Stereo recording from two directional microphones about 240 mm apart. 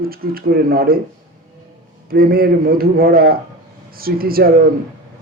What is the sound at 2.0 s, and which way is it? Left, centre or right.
Speech, right.